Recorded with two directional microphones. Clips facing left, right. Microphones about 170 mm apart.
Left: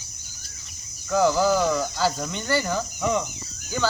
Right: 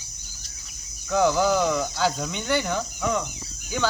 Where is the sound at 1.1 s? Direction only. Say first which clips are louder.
Left 1 dB; centre (ahead or behind).